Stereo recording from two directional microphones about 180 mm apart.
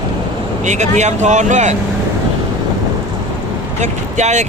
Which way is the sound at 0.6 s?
40° right (ahead or behind).